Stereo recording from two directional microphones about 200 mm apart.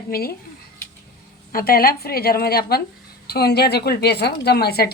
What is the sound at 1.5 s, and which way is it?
A woman's voice, 45° left (ahead or behind).